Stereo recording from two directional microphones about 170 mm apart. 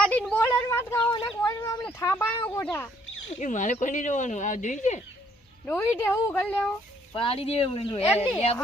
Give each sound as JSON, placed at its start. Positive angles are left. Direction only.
{"t": 0.0, "sound": "a sound", "side_deg": 5}
{"t": 2.0, "sound": "speech", "side_deg": 15}
{"t": 3.2, "sound": "speech", "side_deg": 45}
{"t": 5.6, "sound": "speech", "side_deg": 10}
{"t": 7.1, "sound": "speech", "side_deg": 30}